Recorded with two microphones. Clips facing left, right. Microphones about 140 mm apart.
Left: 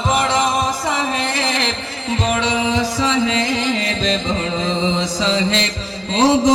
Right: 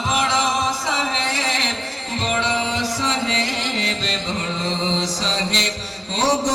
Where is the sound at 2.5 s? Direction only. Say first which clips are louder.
Left 4 dB; 90° left.